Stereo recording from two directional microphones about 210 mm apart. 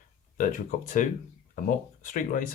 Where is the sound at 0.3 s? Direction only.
40° left (ahead or behind).